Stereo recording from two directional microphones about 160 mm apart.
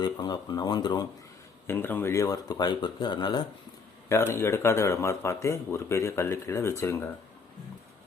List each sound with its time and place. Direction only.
0.0 s speech: 25° left (ahead or behind)
1.6 s speech: 15° left (ahead or behind)
4.1 s speech: 15° left (ahead or behind)